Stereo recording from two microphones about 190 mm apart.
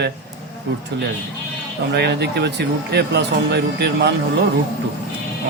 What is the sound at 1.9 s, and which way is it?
Speech, 60° right (ahead or behind).